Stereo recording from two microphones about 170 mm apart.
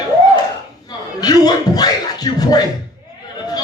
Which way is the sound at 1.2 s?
25° left (ahead or behind).